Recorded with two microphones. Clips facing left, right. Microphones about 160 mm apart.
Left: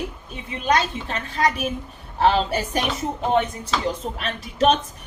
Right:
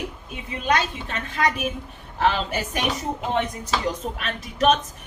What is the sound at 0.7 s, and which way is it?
A woman's voice, 35° left (ahead or behind).